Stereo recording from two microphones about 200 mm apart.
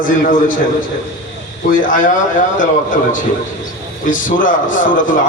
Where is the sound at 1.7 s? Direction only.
40° left (ahead or behind).